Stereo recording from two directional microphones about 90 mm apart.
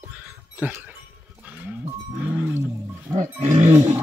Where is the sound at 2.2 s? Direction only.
20° right (ahead or behind).